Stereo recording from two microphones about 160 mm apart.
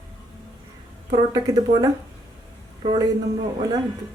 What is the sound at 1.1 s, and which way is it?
Speech, 25° right (ahead or behind).